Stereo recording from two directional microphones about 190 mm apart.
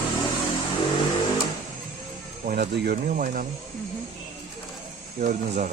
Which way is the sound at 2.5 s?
55° right (ahead or behind).